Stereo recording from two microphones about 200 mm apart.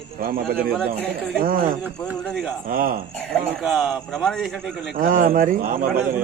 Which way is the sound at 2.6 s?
50° right (ahead or behind).